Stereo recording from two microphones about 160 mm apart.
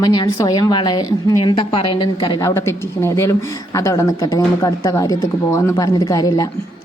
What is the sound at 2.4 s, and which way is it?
A woman's voice, 15° left (ahead or behind).